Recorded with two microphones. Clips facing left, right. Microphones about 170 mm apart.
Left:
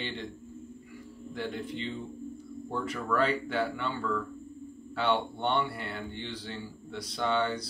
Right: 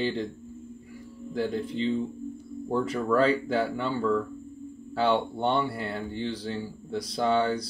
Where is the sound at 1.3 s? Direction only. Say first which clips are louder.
Right 7 dB; 35° right (ahead or behind).